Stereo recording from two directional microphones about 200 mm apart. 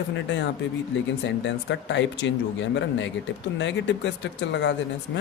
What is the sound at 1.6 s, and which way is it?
Speech, 65° left (ahead or behind).